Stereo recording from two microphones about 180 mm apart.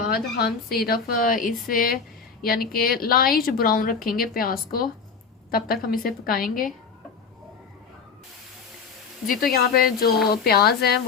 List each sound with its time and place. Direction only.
0.1 s a woman's voice: 60° left (ahead or behind)
9.2 s a woman's voice: 50° left (ahead or behind)